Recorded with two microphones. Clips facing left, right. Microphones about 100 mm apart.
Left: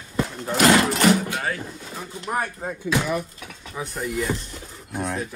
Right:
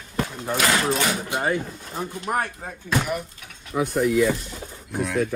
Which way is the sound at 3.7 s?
75° right (ahead or behind).